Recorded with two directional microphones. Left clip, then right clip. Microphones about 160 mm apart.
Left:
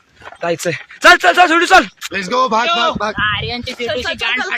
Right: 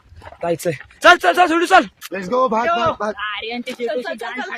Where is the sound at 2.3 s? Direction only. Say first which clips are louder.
Left 3 dB; 30° left (ahead or behind).